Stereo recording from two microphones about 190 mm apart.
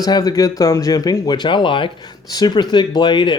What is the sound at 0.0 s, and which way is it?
Speech, 20° left (ahead or behind).